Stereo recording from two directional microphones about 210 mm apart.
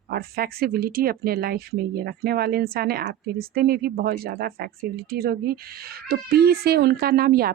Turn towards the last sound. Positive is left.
turn(degrees=-45)  # may be behind; listen again after turning